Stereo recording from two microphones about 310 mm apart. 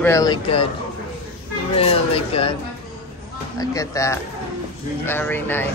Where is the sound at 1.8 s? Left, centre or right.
Centre.